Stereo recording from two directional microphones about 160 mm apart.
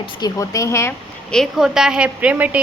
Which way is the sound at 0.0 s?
25° left (ahead or behind).